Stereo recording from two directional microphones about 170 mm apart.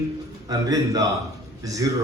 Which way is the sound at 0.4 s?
20° right (ahead or behind).